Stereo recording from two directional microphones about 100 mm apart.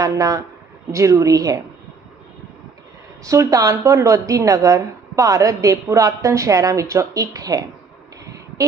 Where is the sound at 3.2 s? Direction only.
35° right (ahead or behind).